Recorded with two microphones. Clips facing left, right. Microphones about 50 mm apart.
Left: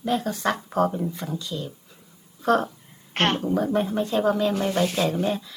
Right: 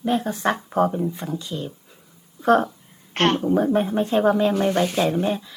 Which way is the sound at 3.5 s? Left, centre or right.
Right.